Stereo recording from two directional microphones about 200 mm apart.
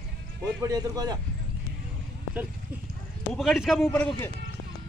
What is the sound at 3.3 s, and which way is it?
A man's voice, centre (ahead or behind).